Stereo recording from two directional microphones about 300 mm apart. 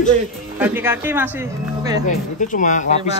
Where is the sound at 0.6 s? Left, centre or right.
Centre.